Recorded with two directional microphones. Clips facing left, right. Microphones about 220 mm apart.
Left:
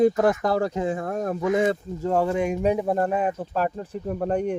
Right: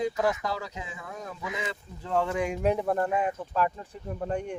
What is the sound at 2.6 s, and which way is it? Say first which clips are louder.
Speech: left 1 dB; 15° left (ahead or behind).